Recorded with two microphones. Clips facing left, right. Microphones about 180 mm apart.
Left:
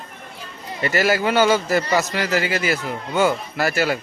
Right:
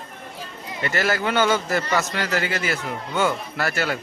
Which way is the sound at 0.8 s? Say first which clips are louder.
Left 4 dB; 10° left (ahead or behind).